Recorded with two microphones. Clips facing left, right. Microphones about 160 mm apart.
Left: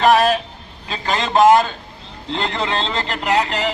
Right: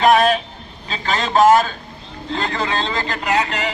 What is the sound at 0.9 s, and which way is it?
A man's voice, 15° left (ahead or behind).